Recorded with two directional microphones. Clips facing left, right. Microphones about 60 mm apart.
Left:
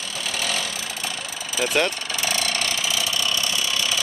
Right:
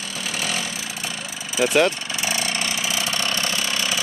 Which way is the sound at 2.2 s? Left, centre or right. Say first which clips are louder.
Even; centre.